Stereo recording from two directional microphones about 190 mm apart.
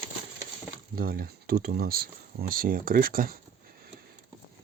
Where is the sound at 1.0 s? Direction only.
50° right (ahead or behind).